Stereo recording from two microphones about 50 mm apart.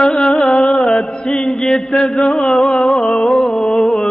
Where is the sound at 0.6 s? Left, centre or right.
Centre.